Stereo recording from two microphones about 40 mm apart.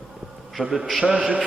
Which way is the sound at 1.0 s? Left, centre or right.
Right.